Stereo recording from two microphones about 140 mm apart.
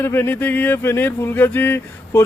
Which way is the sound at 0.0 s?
15° left (ahead or behind).